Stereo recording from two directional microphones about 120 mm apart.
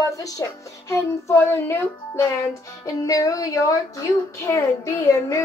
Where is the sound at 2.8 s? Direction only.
30° left (ahead or behind).